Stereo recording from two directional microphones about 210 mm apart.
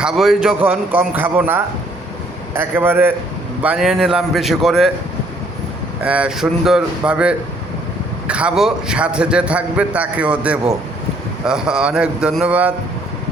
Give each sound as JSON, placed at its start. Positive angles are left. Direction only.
{"t": 0.0, "sound": "a man's voice", "side_deg": 0}
{"t": 6.0, "sound": "a man's voice", "side_deg": -5}